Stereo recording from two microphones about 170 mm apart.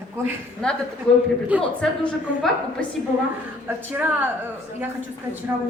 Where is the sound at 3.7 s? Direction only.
10° right (ahead or behind).